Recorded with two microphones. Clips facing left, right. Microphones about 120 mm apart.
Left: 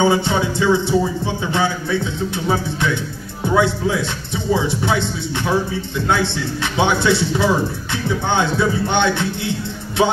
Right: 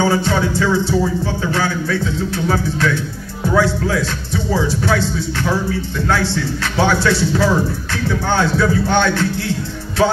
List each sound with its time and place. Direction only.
0.0 s music: 20° left (ahead or behind)